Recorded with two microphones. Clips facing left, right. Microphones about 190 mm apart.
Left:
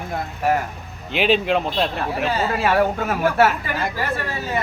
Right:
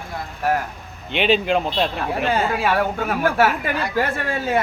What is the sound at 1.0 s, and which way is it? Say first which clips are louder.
Speech: even; centre (ahead or behind).